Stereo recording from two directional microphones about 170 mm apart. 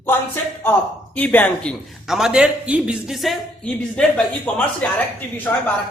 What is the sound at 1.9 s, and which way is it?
Speech, centre (ahead or behind).